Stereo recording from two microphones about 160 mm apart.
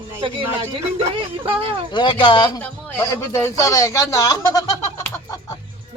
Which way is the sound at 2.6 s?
10° left (ahead or behind).